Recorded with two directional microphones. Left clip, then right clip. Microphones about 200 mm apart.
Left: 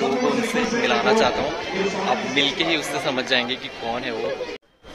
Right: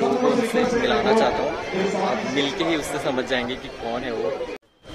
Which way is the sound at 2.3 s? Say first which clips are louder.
Left 2 dB; 10° right (ahead or behind).